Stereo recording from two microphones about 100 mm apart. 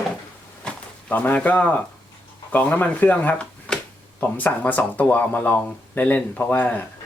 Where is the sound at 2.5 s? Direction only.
15° left (ahead or behind).